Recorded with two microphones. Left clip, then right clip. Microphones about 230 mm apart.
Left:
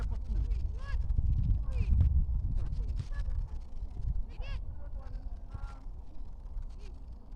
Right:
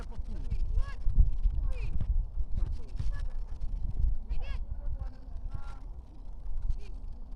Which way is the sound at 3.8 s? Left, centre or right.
Centre.